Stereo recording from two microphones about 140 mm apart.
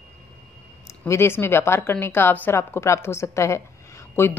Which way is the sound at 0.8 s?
20° left (ahead or behind).